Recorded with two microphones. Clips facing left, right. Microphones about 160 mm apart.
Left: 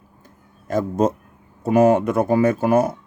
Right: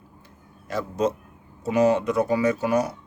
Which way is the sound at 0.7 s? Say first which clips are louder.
Left 5 dB; 45° left (ahead or behind).